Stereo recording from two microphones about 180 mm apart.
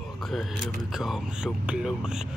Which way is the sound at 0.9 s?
Centre (ahead or behind).